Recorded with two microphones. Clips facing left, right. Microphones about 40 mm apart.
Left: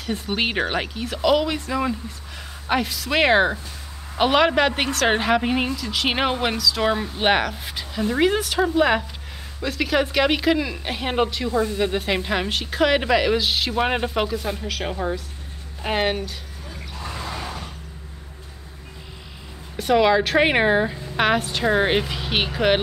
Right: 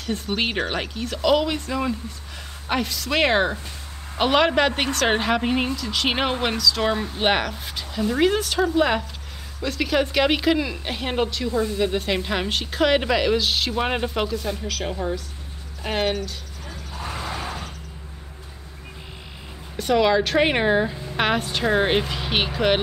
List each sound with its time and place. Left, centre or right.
0.4 s a woman's voice: centre
17.2 s a sound: right
19.8 s a woman's voice: centre